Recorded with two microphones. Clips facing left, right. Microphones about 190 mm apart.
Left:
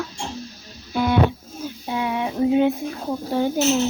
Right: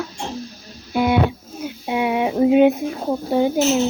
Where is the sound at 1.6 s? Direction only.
15° right (ahead or behind).